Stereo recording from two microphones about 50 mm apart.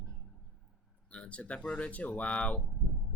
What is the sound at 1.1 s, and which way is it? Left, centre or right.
Speech, left.